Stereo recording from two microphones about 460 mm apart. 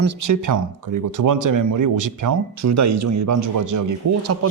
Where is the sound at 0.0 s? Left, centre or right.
Right.